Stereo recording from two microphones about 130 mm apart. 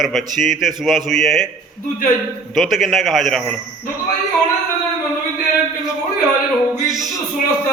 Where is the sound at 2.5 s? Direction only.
Centre (ahead or behind).